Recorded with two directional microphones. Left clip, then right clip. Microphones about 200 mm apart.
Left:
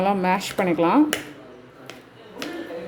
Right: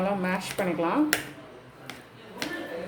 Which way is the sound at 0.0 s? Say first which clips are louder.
Left 7 dB; 50° left (ahead or behind).